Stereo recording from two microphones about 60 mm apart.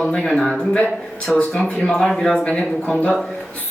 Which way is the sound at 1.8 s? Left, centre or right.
Centre.